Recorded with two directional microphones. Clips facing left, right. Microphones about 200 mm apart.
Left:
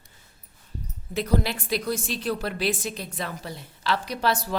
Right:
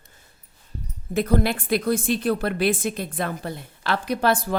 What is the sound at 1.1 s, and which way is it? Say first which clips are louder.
A woman's voice: right 4 dB; 50° right (ahead or behind).